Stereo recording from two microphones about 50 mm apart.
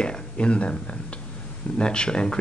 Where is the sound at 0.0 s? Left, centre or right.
Left.